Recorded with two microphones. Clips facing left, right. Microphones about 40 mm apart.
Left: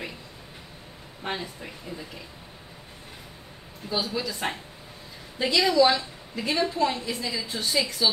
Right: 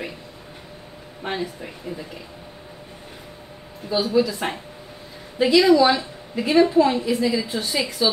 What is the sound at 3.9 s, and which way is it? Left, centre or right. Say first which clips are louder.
A woman's voice: right 9 dB; centre.